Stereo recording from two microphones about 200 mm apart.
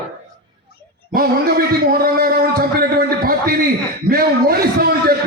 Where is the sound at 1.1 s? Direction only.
50° right (ahead or behind).